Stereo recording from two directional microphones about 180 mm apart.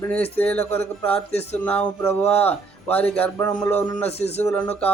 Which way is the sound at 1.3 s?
35° left (ahead or behind).